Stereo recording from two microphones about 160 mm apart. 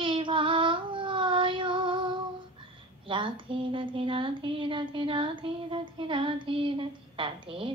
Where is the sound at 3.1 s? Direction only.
30° right (ahead or behind).